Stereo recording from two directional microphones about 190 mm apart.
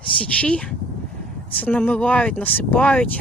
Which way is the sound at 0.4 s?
5° left (ahead or behind).